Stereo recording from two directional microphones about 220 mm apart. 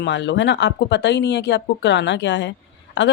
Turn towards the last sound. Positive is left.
turn(degrees=55)  # may be behind; listen again after turning